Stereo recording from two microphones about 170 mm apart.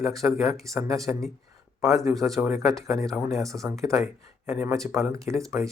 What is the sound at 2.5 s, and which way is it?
Speech, centre (ahead or behind).